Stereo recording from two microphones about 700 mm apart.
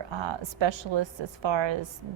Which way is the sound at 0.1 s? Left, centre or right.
Right.